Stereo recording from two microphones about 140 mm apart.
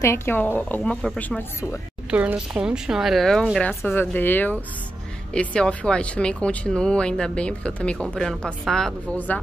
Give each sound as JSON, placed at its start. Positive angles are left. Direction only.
{"t": 0.0, "sound": "speech", "side_deg": 20}
{"t": 2.0, "sound": "speech", "side_deg": -10}